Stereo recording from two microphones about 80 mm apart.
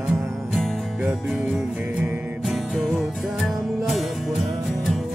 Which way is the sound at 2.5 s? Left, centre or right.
Centre.